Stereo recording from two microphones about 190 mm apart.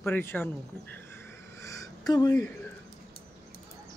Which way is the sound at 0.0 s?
10° left (ahead or behind).